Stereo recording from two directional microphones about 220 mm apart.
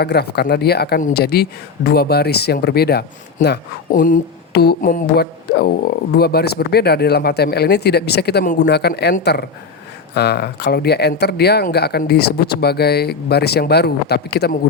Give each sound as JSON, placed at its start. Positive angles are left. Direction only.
{"t": 0.0, "sound": "speech", "side_deg": 45}